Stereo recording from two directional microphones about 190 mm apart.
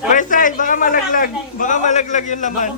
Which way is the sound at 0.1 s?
45° left (ahead or behind).